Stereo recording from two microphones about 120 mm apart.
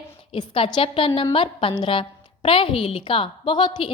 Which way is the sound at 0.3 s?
45° left (ahead or behind).